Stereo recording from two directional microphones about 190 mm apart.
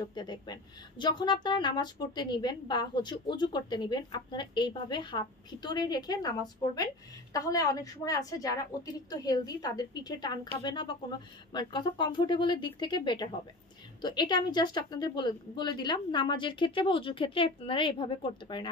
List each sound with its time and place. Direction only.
0.0 s speech: 25° left (ahead or behind)